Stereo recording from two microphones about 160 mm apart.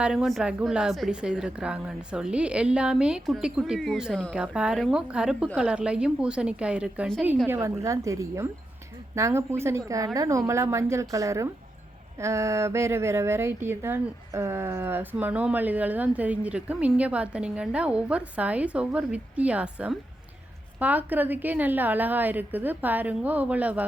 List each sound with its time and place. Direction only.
0.0 s a woman's voice: 5° right (ahead or behind)